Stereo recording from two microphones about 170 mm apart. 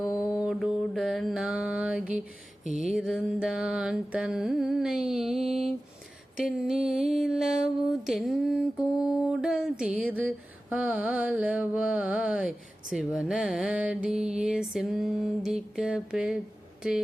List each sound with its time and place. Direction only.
0.0 s mantra: 20° left (ahead or behind)
0.3 s mantra: 5° right (ahead or behind)
5.0 s music: centre (ahead or behind)
6.4 s mantra: centre (ahead or behind)